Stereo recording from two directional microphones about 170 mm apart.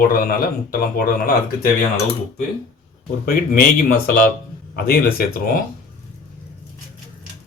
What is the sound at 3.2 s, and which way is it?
Speech, 55° left (ahead or behind).